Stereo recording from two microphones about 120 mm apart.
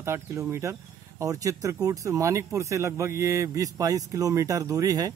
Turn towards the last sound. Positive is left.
turn(degrees=-30)  # may be behind; listen again after turning